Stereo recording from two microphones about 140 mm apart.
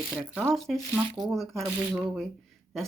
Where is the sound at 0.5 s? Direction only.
Centre (ahead or behind).